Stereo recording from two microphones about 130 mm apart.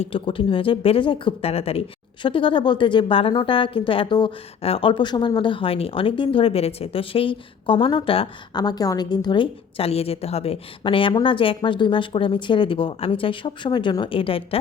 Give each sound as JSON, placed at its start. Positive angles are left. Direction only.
{"t": 0.0, "sound": "a woman's voice", "side_deg": 45}
{"t": 8.5, "sound": "a woman's voice", "side_deg": 30}